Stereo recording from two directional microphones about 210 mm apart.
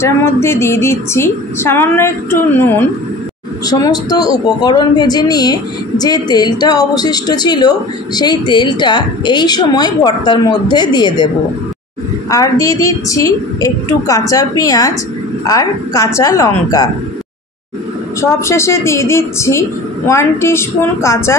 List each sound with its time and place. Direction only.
0.0 s a woman's voice: 10° left (ahead or behind)
12.3 s a woman's voice: 15° left (ahead or behind)
18.2 s a woman's voice: 10° left (ahead or behind)